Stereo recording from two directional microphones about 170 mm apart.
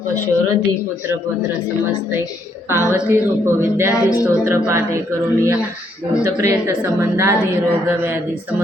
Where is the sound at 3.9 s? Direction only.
20° left (ahead or behind).